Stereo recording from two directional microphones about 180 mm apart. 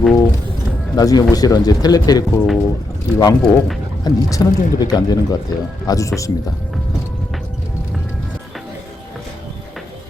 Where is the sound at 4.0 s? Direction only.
20° left (ahead or behind).